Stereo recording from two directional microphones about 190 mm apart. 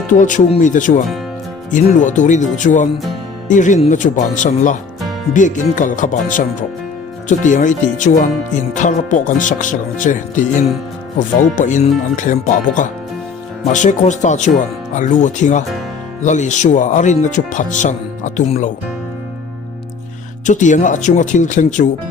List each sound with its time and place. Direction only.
0.1 s speech: 40° left (ahead or behind)
20.5 s speech: 40° left (ahead or behind)